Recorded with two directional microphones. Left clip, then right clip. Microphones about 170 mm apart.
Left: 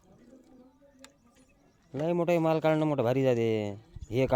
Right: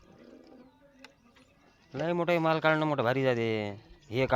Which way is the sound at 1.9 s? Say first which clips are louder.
Left 1 dB; 45° left (ahead or behind).